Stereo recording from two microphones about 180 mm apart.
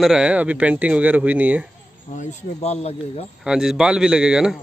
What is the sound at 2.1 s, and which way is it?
Speech, 40° left (ahead or behind).